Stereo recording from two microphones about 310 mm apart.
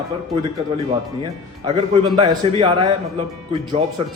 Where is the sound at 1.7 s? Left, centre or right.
Centre.